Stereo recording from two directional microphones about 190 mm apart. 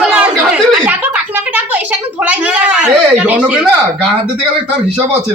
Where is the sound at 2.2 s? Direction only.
5° right (ahead or behind).